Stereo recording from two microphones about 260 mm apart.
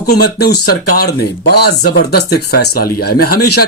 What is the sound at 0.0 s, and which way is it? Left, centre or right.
Speech, left.